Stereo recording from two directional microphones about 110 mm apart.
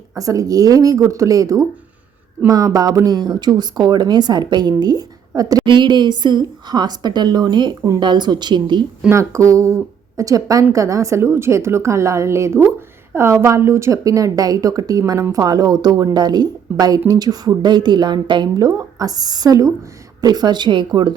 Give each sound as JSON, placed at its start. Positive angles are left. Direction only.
{"t": 0.1, "sound": "a woman's voice", "side_deg": -30}
{"t": 9.0, "sound": "a woman's voice", "side_deg": -25}